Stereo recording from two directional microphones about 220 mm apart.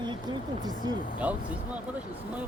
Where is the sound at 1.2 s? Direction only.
5° right (ahead or behind).